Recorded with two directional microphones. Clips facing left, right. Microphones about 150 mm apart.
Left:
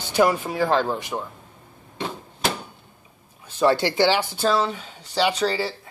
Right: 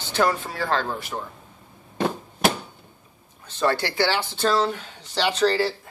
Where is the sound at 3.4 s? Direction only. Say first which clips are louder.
Left 4 dB; 15° left (ahead or behind).